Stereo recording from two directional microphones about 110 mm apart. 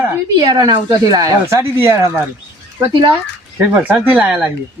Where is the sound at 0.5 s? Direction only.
40° right (ahead or behind); by 2.2 s 25° right (ahead or behind).